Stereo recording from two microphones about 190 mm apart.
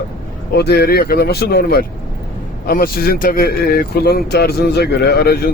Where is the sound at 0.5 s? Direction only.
60° left (ahead or behind).